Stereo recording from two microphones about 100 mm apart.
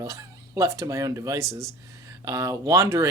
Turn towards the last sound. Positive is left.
turn(degrees=-30)  # may be behind; listen again after turning